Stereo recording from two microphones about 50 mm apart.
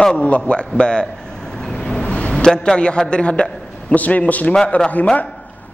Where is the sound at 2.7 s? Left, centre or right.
Centre.